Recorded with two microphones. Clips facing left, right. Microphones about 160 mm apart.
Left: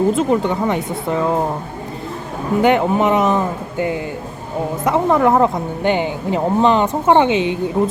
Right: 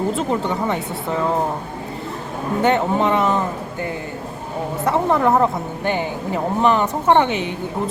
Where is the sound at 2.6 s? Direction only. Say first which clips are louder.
Left 3 dB; 15° left (ahead or behind).